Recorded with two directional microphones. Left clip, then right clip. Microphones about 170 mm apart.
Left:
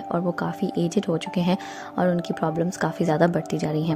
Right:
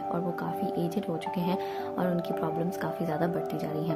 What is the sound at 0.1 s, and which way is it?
Speech, 45° left (ahead or behind).